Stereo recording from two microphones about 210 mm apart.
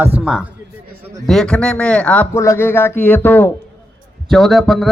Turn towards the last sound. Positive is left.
turn(degrees=0)  # may be behind; listen again after turning